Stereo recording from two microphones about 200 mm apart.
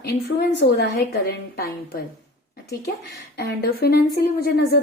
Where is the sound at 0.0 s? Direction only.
55° left (ahead or behind).